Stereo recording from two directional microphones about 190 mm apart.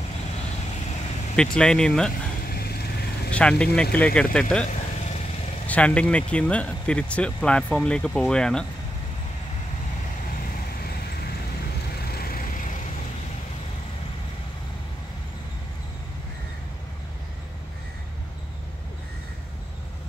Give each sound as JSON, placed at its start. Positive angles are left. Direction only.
{"t": 1.3, "sound": "speech", "side_deg": 5}
{"t": 2.4, "sound": "vehicle", "side_deg": 55}
{"t": 3.3, "sound": "speech", "side_deg": 5}
{"t": 4.6, "sound": "vehicle", "side_deg": 40}
{"t": 5.7, "sound": "speech", "side_deg": 5}
{"t": 12.1, "sound": "vehicle", "side_deg": 50}